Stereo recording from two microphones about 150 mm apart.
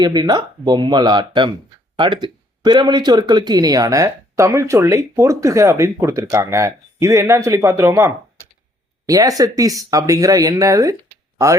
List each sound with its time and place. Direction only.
0.0 s speech: 30° right (ahead or behind)